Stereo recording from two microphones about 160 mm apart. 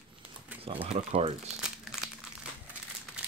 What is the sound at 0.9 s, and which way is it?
Speech, 40° right (ahead or behind).